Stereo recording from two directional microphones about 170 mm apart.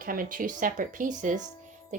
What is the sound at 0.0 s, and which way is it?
Speech, 55° right (ahead or behind).